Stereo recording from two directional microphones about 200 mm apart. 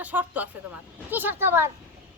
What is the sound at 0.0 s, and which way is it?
Speech, 10° right (ahead or behind).